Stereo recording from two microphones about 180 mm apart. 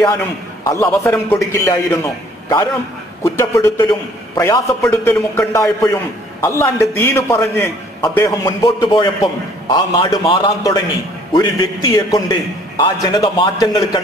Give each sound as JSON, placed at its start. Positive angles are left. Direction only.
{"t": 0.7, "sound": "a man's voice", "side_deg": 15}
{"t": 3.3, "sound": "a man's voice", "side_deg": 15}